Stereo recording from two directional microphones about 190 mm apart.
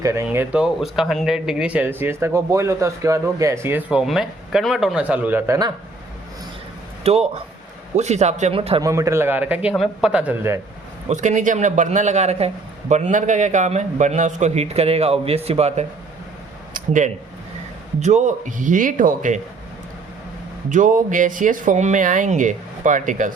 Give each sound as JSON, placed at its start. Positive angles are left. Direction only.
{"t": 0.0, "sound": "speech", "side_deg": -15}
{"t": 7.0, "sound": "a man's voice", "side_deg": -35}
{"t": 8.8, "sound": "speech", "side_deg": -15}
{"t": 11.1, "sound": "a man's voice", "side_deg": -40}
{"t": 20.7, "sound": "speech", "side_deg": -45}